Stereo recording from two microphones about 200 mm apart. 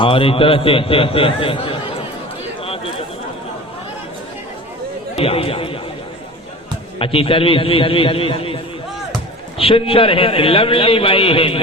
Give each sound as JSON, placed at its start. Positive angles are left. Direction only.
{"t": 0.0, "sound": "a man's voice", "side_deg": 25}
{"t": 5.1, "sound": "a man's voice", "side_deg": 30}
{"t": 7.0, "sound": "a man's voice", "side_deg": 25}